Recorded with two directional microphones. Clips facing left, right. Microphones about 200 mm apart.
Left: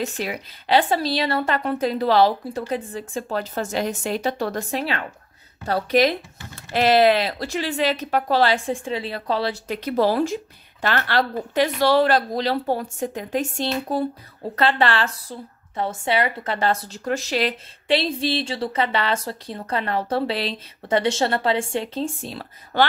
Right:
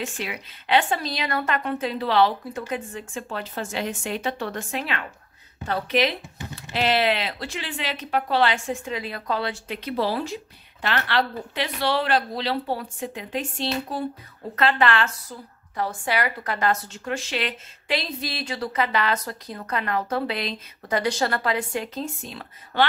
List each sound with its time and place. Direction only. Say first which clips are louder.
0.0 s speech: left 4 dB; 40° left (ahead or behind)
14.5 s a woman's voice: left 1 dB; 35° left (ahead or behind)